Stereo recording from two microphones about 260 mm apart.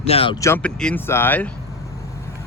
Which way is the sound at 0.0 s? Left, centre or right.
Left.